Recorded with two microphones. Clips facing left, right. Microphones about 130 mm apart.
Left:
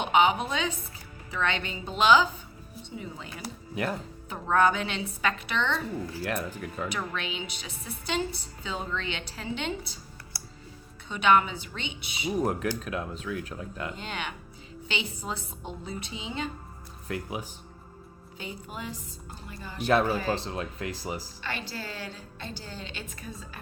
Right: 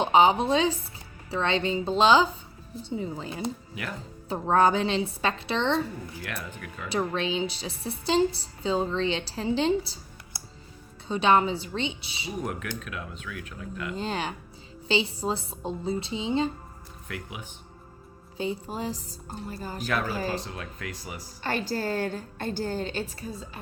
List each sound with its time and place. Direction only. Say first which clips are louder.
0.0 s a woman's voice: right 3 dB; 30° right (ahead or behind)
6.8 s a woman's voice: right 7 dB; 30° right (ahead or behind)
10.3 s music: right 2 dB; 20° right (ahead or behind)
11.1 s a woman's voice: right 1 dB; 30° right (ahead or behind)
12.4 s speech: left 5 dB; 35° left (ahead or behind)
13.9 s a woman's voice: right 6 dB; 35° right (ahead or behind)
17.1 s speech: left 5 dB; 35° left (ahead or behind)
18.3 s a woman's voice: right 8 dB; 30° right (ahead or behind)
20.3 s speech: left 2 dB; 30° left (ahead or behind)
21.4 s a woman's voice: right 12 dB; 45° right (ahead or behind)